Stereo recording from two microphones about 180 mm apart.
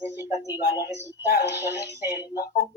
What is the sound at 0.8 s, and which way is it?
Speech, 15° right (ahead or behind).